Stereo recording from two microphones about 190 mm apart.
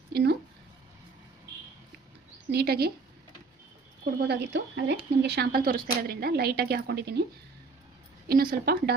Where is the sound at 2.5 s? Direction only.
55° right (ahead or behind).